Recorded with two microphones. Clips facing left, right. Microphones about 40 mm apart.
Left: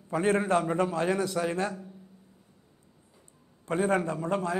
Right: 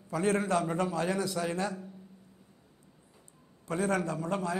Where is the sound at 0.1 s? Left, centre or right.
Left.